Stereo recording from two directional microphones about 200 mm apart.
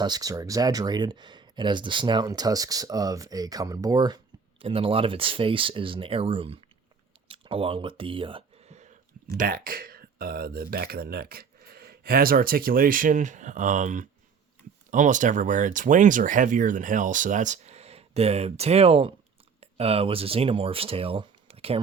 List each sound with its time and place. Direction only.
0.0 s speech: 20° right (ahead or behind)
7.3 s a sound: 25° right (ahead or behind)
9.4 s speech: 45° right (ahead or behind)